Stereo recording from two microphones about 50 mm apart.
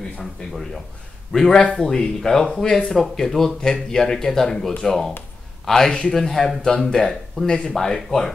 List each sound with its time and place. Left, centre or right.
0.2 s speech: centre
1.4 s a man's voice: left